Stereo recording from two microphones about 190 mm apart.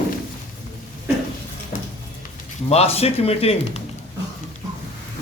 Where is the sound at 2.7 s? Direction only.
35° left (ahead or behind).